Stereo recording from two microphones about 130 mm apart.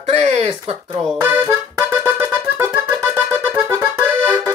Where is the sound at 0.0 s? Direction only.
55° right (ahead or behind).